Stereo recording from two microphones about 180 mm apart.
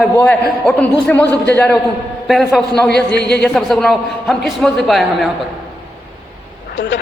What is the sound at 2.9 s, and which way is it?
Speech, 70° left (ahead or behind).